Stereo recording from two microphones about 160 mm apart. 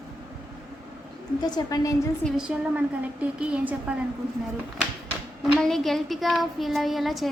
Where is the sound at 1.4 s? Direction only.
25° left (ahead or behind).